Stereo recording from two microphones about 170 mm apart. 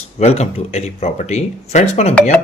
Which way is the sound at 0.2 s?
40° left (ahead or behind).